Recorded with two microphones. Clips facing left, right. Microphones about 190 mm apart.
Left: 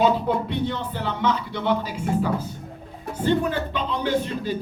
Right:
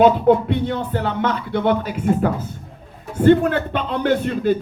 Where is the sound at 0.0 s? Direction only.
55° right (ahead or behind).